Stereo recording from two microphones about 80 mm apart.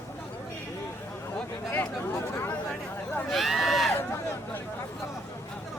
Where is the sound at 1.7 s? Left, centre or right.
Left.